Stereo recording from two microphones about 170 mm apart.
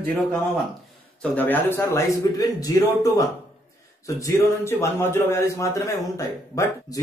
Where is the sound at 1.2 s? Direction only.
10° left (ahead or behind).